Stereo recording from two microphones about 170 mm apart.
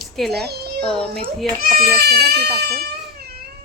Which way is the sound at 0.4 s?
70° right (ahead or behind).